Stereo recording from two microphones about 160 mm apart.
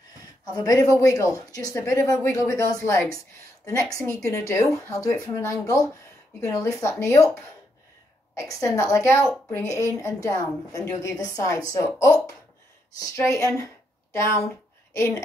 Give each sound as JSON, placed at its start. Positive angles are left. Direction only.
{"t": 0.5, "sound": "a woman's voice", "side_deg": 20}
{"t": 8.4, "sound": "a woman's voice", "side_deg": 20}